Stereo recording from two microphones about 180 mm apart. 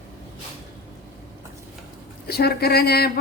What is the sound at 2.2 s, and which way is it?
Speech, 60° left (ahead or behind).